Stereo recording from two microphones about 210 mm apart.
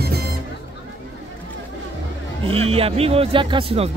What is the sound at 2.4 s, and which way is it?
Speech, 30° right (ahead or behind).